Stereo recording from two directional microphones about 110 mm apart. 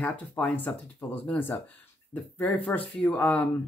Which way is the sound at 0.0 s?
15° left (ahead or behind).